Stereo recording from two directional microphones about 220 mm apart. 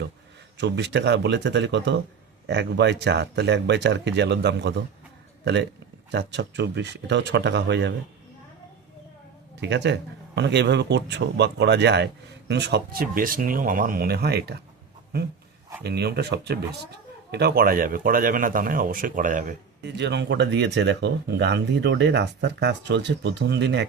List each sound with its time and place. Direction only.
0.5 s speech: 50° right (ahead or behind)
6.1 s speech: 50° right (ahead or behind)
9.6 s speech: 50° right (ahead or behind)
15.8 s speech: 45° right (ahead or behind)
19.8 s speech: 50° right (ahead or behind)